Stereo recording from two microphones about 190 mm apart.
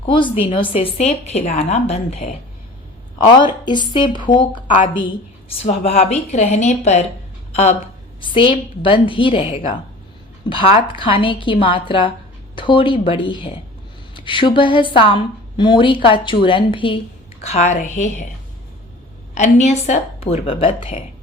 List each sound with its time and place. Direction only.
0.0 s a woman's voice: 25° left (ahead or behind)
3.2 s a woman's voice: 25° left (ahead or behind)
5.6 s a woman's voice: 35° left (ahead or behind)
19.3 s a woman's voice: 40° left (ahead or behind)